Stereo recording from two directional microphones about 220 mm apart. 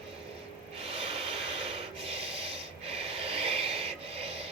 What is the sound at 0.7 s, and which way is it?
Snort, 25° right (ahead or behind).